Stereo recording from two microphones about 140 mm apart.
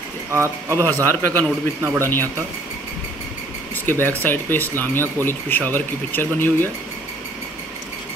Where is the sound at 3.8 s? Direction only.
15° left (ahead or behind).